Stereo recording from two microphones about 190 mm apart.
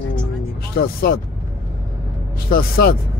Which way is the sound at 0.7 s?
50° left (ahead or behind).